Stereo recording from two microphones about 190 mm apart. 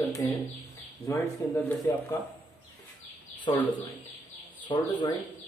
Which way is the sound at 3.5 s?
25° left (ahead or behind).